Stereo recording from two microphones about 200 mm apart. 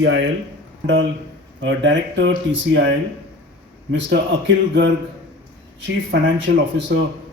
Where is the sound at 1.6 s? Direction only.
65° right (ahead or behind).